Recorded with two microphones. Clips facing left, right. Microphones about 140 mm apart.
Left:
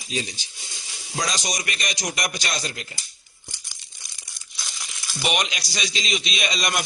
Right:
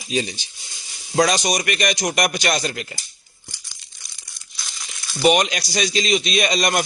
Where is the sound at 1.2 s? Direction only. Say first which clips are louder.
Right 10 dB; 65° right (ahead or behind).